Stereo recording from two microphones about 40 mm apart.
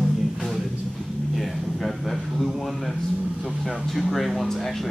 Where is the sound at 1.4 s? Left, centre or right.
Centre.